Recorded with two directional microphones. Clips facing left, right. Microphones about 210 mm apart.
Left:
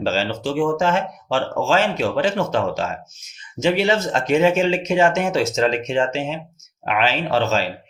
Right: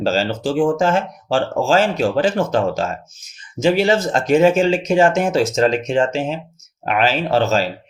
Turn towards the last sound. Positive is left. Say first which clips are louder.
# right 3 dB
turn(degrees=-40)  # may be behind; listen again after turning